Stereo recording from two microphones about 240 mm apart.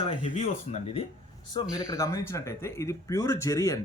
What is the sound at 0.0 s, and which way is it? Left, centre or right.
Speech, left.